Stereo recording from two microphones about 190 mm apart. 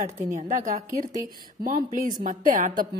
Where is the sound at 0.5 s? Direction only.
40° right (ahead or behind).